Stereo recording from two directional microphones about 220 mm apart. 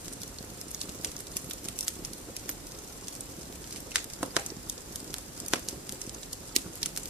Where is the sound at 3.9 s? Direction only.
5° right (ahead or behind).